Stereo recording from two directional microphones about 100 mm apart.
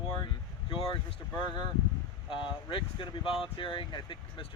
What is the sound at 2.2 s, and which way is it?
Speech, 60° left (ahead or behind).